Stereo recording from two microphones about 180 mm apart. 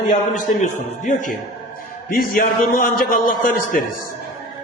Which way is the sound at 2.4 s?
50° left (ahead or behind).